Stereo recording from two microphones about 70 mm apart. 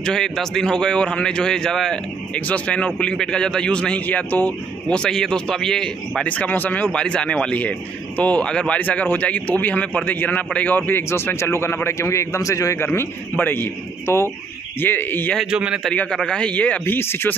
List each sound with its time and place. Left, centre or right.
0.0 s a man's voice: centre
2.4 s a man's voice: centre
6.2 s speech: left
6.9 s a man's voice: centre; by 12.7 s left
12.7 s a man's voice: left
14.0 s a man's voice: left
15.5 s a man's voice: centre
15.9 s a man's voice: centre
16.8 s a man's voice: left